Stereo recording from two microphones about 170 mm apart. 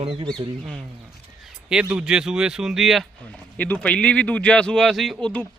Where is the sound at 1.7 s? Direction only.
5° right (ahead or behind).